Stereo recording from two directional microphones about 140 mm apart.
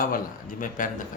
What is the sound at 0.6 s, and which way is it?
Speech, 75° left (ahead or behind).